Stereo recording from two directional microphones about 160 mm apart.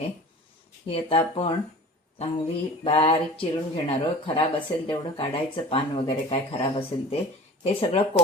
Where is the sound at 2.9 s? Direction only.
35° left (ahead or behind).